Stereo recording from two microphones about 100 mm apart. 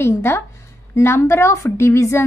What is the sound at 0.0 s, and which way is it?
A woman's voice, 25° left (ahead or behind).